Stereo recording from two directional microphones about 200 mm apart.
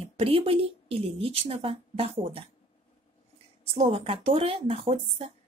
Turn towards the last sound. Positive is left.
turn(degrees=-30)  # may be behind; listen again after turning